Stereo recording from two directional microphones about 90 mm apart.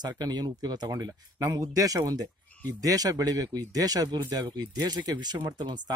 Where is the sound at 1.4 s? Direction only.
35° right (ahead or behind).